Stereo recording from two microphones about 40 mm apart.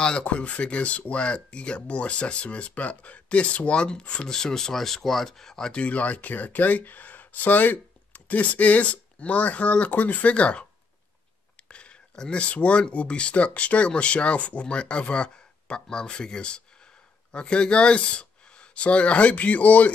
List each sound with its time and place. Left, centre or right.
0.0 s speech: left
4.3 s speech: centre
5.7 s speech: left
10.3 s speech: left
12.2 s speech: left